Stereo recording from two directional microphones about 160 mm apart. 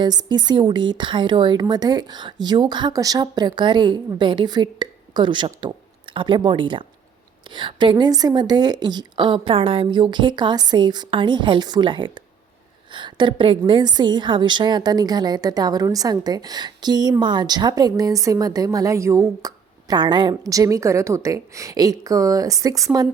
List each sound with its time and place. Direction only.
0.0 s a woman's voice: 25° right (ahead or behind)